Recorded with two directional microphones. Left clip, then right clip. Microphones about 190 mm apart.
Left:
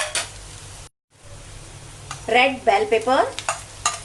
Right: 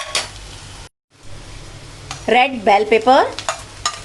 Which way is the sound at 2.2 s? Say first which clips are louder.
Right 3 dB; 50° right (ahead or behind).